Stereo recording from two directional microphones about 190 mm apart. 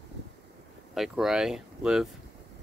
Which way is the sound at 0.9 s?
Centre (ahead or behind).